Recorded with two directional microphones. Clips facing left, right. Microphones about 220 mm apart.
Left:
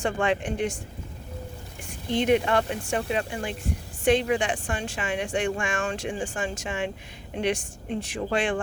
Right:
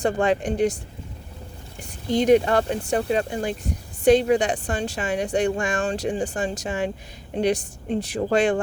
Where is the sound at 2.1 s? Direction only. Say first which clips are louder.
Right 5 dB; 40° right (ahead or behind).